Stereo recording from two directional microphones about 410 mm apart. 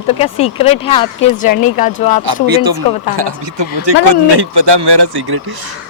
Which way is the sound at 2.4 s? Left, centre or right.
Right.